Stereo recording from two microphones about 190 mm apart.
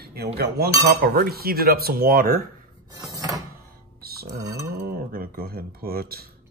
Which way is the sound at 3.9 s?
55° right (ahead or behind).